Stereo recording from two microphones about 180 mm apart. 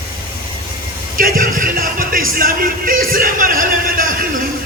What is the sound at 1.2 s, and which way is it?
Music, 50° right (ahead or behind).